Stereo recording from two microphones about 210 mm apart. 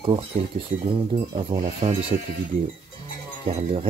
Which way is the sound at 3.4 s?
25° right (ahead or behind).